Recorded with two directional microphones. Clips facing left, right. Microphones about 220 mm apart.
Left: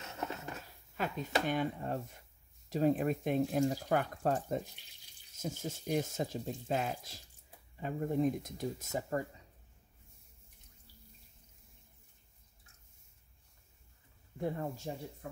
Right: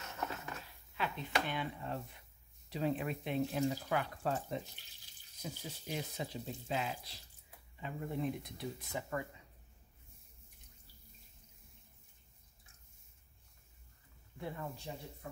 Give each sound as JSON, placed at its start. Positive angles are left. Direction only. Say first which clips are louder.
{"t": 0.1, "sound": "a sound", "louder": "left 2 dB", "side_deg": 25}
{"t": 0.9, "sound": "speech", "louder": "left 3 dB", "side_deg": 45}
{"t": 14.4, "sound": "speech", "louder": "left 7 dB", "side_deg": 40}